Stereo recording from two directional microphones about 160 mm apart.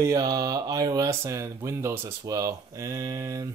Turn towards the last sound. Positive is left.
turn(degrees=-20)  # may be behind; listen again after turning